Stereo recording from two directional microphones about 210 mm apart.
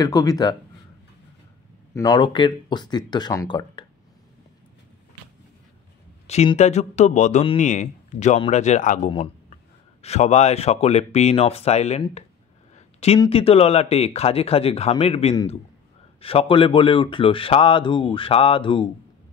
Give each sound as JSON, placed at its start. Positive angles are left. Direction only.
{"t": 0.0, "sound": "speech", "side_deg": 15}
{"t": 2.0, "sound": "speech", "side_deg": 20}
{"t": 6.2, "sound": "speech", "side_deg": 30}
{"t": 9.1, "sound": "a sound", "side_deg": 30}
{"t": 10.0, "sound": "speech", "side_deg": 30}
{"t": 12.7, "sound": "a sound", "side_deg": 30}
{"t": 13.2, "sound": "speech", "side_deg": 25}